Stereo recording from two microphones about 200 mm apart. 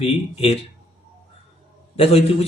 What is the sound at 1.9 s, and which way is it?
Speech, 30° left (ahead or behind).